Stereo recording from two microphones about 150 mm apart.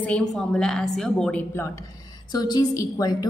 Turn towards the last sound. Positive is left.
turn(degrees=25)  # may be behind; listen again after turning